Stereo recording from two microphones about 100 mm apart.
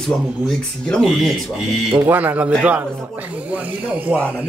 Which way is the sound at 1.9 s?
15° right (ahead or behind).